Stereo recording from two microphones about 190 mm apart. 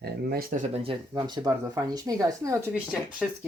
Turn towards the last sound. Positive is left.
turn(degrees=0)  # may be behind; listen again after turning